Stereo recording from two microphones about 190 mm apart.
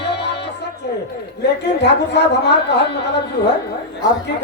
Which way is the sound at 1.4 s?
65° left (ahead or behind).